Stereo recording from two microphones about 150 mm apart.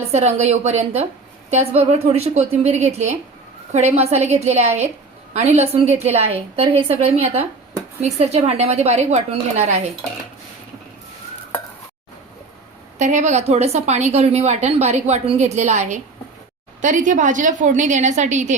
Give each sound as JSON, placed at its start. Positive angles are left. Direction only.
{"t": 0.1, "sound": "a woman's voice", "side_deg": -45}
{"t": 13.0, "sound": "a woman's voice", "side_deg": -50}